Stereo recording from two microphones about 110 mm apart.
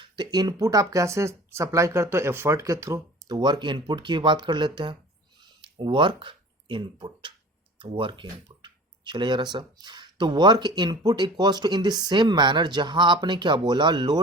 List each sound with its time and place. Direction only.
0.0 s speech: 40° right (ahead or behind)
3.2 s speech: 40° right (ahead or behind)
5.4 s a sound: 50° right (ahead or behind)
7.8 s speech: 50° right (ahead or behind)